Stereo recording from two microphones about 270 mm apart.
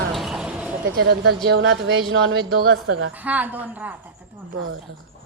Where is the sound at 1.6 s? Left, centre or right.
Right.